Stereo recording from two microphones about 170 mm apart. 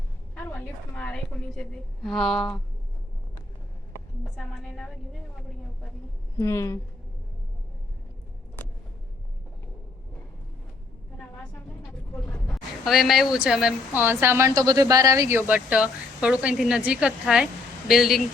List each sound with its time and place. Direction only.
0.3 s a woman's voice: 10° left (ahead or behind)
4.2 s a woman's voice: 5° left (ahead or behind)
6.3 s a woman's voice: 15° left (ahead or behind)
11.8 s vehicle: 15° left (ahead or behind)
12.8 s a woman's voice: centre (ahead or behind)